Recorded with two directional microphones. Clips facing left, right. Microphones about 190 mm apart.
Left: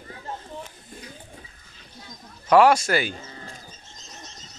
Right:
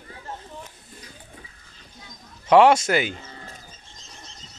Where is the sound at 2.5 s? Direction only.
25° right (ahead or behind).